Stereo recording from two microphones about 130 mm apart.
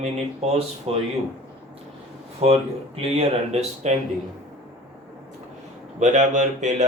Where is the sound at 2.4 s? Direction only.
55° right (ahead or behind).